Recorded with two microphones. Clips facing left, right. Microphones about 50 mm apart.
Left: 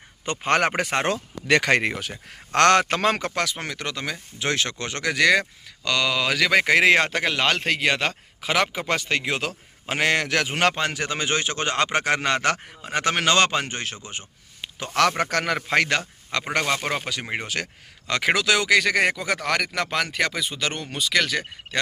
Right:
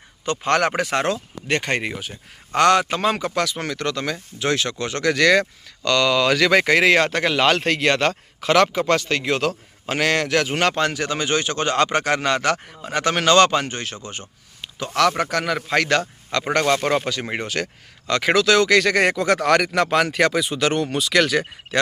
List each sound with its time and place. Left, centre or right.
0.3 s a man's voice: left
1.5 s speech: left
2.6 s speech: left
3.3 s speech: left
3.7 s a man's voice: centre
4.4 s a man's voice: left
7.2 s a man's voice: centre; by 14.8 s left
15.2 s speech: left
15.5 s a man's voice: left
16.4 s a man's voice: centre